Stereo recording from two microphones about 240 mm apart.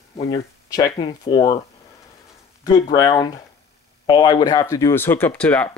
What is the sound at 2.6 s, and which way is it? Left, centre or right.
Speech, centre.